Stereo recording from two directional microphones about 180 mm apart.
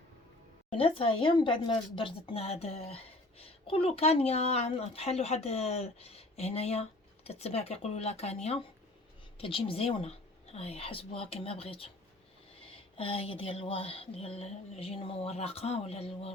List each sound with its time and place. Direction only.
0.7 s speech: 30° left (ahead or behind)
13.0 s speech: 30° left (ahead or behind)